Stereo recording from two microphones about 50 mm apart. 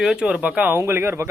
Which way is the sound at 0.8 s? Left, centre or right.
Right.